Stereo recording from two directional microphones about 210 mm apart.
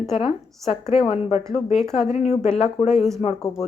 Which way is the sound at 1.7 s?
Centre (ahead or behind).